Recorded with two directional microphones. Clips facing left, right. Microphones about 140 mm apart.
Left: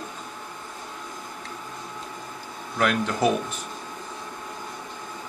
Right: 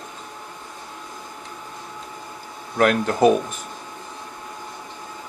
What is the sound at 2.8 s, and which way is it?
Speech, 45° right (ahead or behind).